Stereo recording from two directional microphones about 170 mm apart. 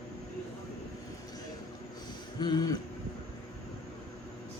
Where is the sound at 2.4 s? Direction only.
25° left (ahead or behind).